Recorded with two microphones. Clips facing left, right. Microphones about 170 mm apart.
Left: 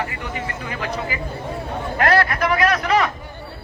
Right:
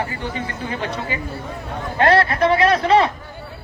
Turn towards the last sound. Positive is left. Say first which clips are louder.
# right 3 dB
turn(degrees=-30)  # may be behind; listen again after turning